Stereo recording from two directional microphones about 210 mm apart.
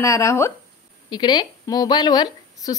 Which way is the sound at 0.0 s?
15° left (ahead or behind).